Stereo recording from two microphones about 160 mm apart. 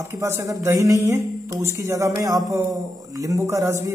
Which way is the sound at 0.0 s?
15° right (ahead or behind).